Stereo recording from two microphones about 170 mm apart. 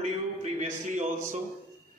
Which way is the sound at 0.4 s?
45° right (ahead or behind).